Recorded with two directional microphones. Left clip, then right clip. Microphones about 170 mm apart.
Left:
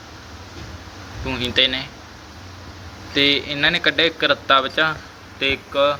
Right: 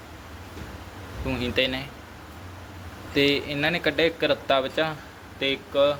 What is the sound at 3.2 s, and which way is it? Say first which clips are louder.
A man's voice: left 5 dB; 15° right (ahead or behind).